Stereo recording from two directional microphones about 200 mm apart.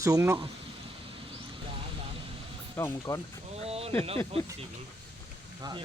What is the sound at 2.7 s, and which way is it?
Speech, 15° left (ahead or behind).